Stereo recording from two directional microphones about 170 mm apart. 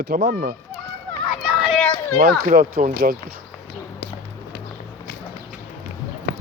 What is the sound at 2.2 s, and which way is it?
Speech, 60° right (ahead or behind).